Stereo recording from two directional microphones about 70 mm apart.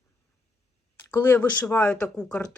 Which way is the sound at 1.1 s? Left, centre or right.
Left.